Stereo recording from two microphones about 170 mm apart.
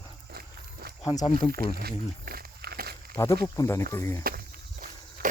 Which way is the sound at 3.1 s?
20° left (ahead or behind).